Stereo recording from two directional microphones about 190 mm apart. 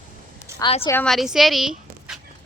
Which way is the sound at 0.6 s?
30° left (ahead or behind).